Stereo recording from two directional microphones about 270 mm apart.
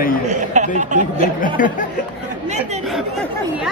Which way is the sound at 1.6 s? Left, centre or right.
Left.